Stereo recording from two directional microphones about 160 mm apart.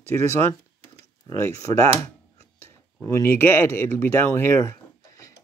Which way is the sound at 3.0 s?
15° left (ahead or behind).